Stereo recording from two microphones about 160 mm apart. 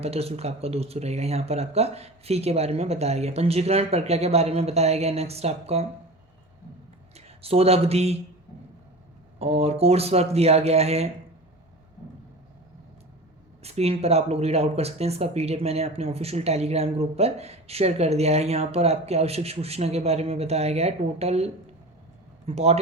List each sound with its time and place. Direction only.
0.0 s speech: 40° right (ahead or behind)
7.1 s speech: 40° right (ahead or behind)
9.4 s speech: 40° right (ahead or behind)
13.6 s speech: 40° right (ahead or behind)